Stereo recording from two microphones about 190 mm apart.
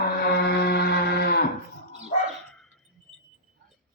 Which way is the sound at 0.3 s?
55° left (ahead or behind).